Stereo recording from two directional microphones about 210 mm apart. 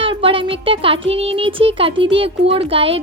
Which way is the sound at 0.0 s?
25° right (ahead or behind).